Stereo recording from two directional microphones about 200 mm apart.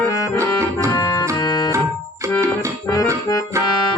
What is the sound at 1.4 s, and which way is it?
Organ, 20° left (ahead or behind).